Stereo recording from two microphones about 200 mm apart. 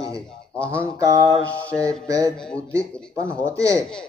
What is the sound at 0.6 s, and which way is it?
Speech, 5° left (ahead or behind).